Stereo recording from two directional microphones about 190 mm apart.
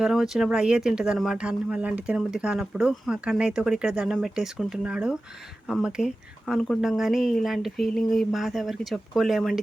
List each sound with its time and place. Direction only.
0.0 s speech: centre (ahead or behind)